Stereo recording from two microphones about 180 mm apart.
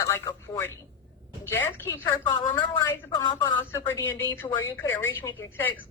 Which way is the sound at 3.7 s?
15° left (ahead or behind).